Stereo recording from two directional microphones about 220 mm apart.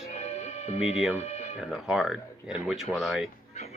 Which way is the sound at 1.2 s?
30° left (ahead or behind).